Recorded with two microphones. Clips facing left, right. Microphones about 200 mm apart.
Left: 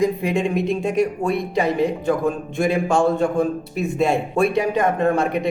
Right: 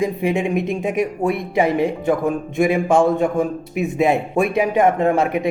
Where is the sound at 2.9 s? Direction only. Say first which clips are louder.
Right 2 dB; 20° right (ahead or behind).